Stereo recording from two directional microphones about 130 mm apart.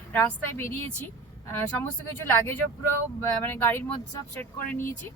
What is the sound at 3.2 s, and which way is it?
Speech, 15° left (ahead or behind).